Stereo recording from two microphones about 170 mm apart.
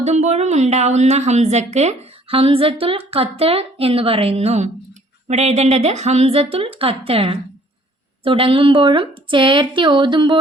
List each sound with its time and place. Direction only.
0.0 s a woman's voice: 40° right (ahead or behind)